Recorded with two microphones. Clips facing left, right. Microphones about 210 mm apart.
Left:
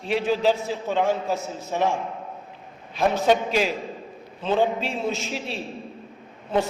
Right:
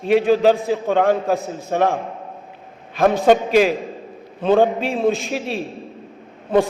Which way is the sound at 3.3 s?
55° right (ahead or behind).